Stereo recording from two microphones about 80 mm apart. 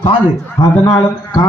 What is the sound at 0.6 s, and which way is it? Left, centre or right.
Speech, left.